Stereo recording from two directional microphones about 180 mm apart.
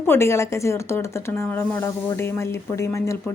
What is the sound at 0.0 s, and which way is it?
A woman's voice, 15° left (ahead or behind).